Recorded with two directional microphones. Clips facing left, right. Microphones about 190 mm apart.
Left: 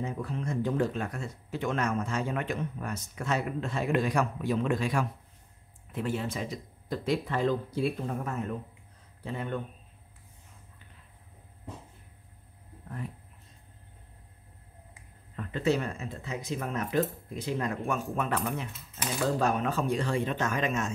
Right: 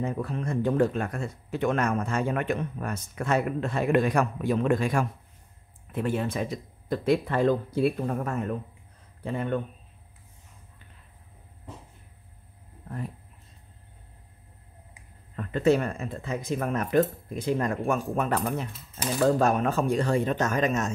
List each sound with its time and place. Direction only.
0.0 s speech: 60° right (ahead or behind)
15.3 s speech: 50° right (ahead or behind)